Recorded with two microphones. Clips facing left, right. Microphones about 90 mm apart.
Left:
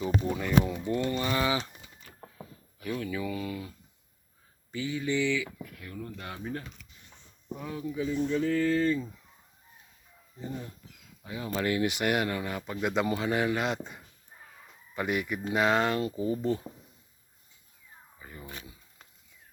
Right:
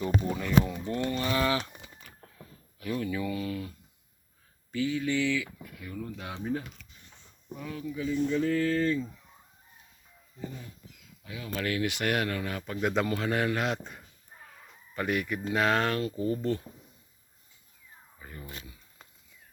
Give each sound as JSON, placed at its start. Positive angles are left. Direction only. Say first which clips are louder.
{"t": 0.0, "sound": "speech", "louder": "even", "side_deg": 10}
{"t": 1.1, "sound": "speech", "louder": "right 4 dB", "side_deg": 0}
{"t": 2.7, "sound": "speech", "louder": "right 1 dB", "side_deg": 0}
{"t": 4.7, "sound": "speech", "louder": "right 2 dB", "side_deg": 5}
{"t": 7.6, "sound": "speech", "louder": "left 1 dB", "side_deg": 15}
{"t": 8.3, "sound": "speech", "louder": "left 1 dB", "side_deg": 0}
{"t": 11.2, "sound": "speech", "louder": "left 3 dB", "side_deg": 30}
{"t": 18.2, "sound": "a sound", "louder": "right 1 dB", "side_deg": 5}